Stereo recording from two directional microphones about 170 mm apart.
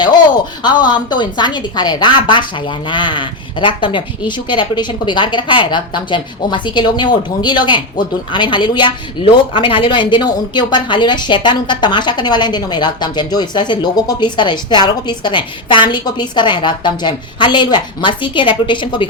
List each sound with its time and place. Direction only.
0.6 s a woman's voice: 25° left (ahead or behind)